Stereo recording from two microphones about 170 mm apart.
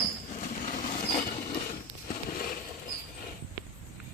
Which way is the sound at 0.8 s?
55° left (ahead or behind).